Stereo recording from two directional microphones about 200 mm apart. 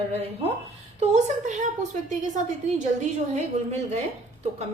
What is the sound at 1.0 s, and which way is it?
A woman's voice, 35° right (ahead or behind).